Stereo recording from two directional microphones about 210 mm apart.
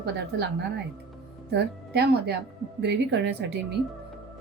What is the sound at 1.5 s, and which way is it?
Speech, 50° right (ahead or behind).